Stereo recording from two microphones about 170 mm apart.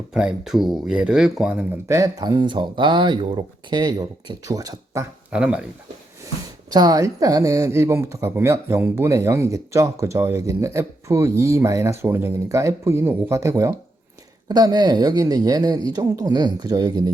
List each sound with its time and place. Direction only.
0.1 s speech: 5° right (ahead or behind)
1.9 s speech: 20° right (ahead or behind)
5.3 s speech: 5° right (ahead or behind)
6.2 s speech: 25° right (ahead or behind)